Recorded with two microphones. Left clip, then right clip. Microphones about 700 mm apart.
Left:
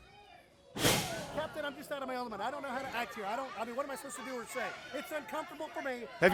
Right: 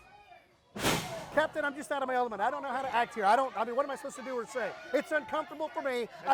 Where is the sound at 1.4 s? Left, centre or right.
Right.